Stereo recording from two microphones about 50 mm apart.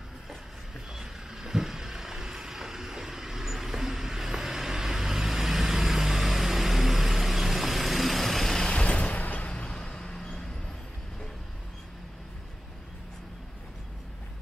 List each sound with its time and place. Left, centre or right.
0.9 s vehicle: centre
8.6 s a sound: left
9.2 s vehicle: left; by 10.4 s centre